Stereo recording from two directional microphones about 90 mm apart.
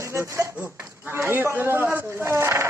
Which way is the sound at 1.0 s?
25° right (ahead or behind).